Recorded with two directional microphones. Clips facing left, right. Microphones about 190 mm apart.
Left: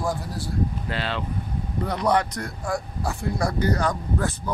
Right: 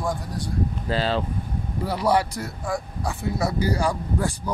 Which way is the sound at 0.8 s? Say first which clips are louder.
Right 5 dB; 35° right (ahead or behind).